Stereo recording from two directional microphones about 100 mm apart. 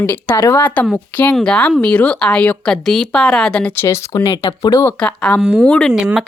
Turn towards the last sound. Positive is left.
turn(degrees=-5)  # may be behind; listen again after turning